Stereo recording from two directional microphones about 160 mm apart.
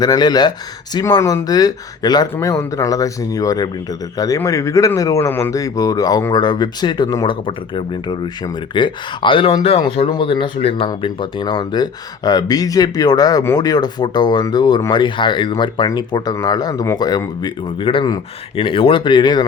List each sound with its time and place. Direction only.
0.0 s speech: 25° left (ahead or behind)